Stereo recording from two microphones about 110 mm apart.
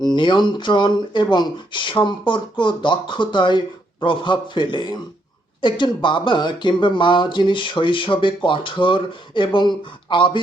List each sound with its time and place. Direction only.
0.0 s speech: 40° left (ahead or behind)